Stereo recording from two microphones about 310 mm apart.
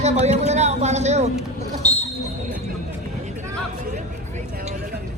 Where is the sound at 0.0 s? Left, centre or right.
Right.